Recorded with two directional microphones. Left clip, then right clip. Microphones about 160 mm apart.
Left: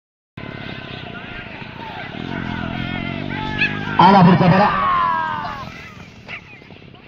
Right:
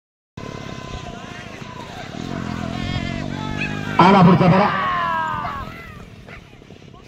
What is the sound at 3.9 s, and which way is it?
Music, 25° left (ahead or behind).